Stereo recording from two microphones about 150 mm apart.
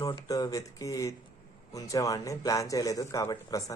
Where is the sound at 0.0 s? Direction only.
25° left (ahead or behind).